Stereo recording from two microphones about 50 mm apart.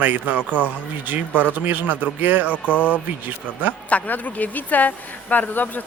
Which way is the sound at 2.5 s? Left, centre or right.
Left.